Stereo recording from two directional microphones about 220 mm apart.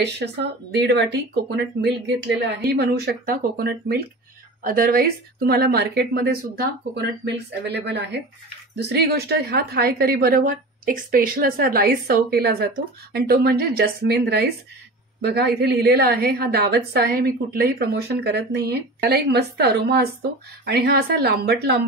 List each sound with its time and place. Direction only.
0.0 s a woman's voice: 50° right (ahead or behind)